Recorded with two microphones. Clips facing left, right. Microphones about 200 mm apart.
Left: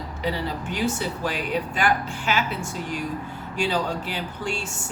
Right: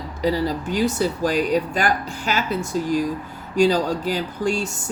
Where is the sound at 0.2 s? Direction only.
40° right (ahead or behind).